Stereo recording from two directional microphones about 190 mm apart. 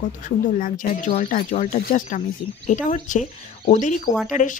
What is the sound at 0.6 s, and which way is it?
Speech, 45° left (ahead or behind).